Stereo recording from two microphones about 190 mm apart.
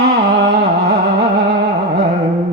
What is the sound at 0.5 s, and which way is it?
Carnatic music, 60° right (ahead or behind).